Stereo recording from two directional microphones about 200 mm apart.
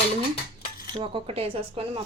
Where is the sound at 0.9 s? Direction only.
25° right (ahead or behind).